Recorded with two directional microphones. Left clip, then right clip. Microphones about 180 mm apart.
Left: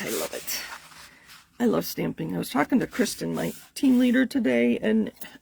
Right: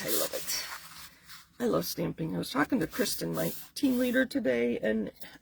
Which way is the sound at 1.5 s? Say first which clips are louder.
Left 4 dB; 45° left (ahead or behind).